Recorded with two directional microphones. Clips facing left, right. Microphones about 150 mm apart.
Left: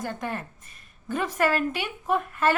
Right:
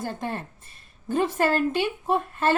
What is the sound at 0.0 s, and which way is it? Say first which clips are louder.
A woman's voice: right 1 dB; 30° right (ahead or behind).